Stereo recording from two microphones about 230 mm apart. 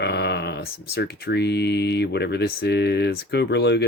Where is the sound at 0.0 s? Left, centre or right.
Left.